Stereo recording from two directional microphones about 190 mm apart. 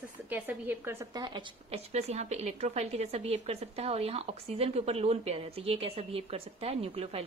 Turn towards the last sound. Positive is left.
turn(degrees=-30)  # may be behind; listen again after turning